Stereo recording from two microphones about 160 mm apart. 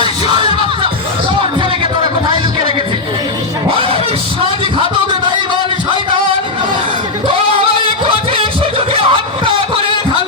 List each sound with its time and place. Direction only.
0.3 s music: 30° right (ahead or behind)
7.3 s music: 35° right (ahead or behind)
8.9 s a sound: 35° right (ahead or behind)